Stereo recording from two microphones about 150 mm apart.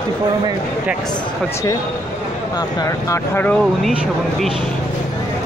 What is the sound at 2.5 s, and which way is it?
Speech, 25° left (ahead or behind).